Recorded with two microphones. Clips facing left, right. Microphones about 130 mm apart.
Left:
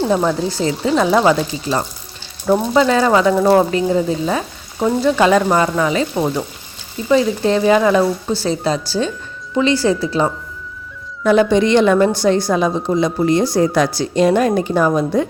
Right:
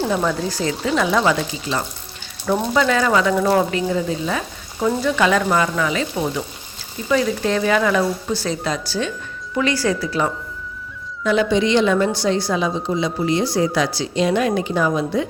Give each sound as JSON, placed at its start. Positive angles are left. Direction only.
{"t": 0.1, "sound": "speech", "side_deg": 25}
{"t": 11.2, "sound": "a woman's voice", "side_deg": 50}